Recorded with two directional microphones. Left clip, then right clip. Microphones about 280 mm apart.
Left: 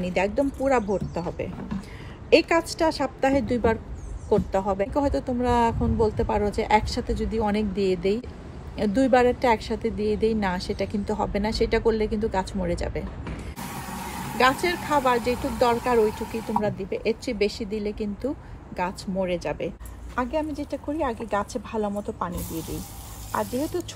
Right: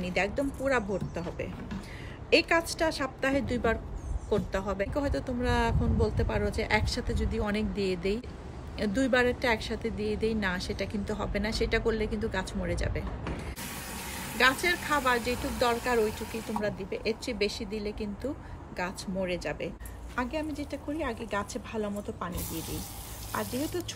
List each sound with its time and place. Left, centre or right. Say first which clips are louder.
0.0 s speech: left 6 dB; centre
22.6 s speech: left 4 dB; centre